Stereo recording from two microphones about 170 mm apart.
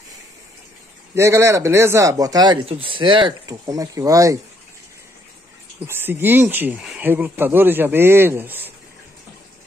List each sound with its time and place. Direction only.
1.1 s speech: 15° right (ahead or behind)
5.9 s speech: 15° right (ahead or behind)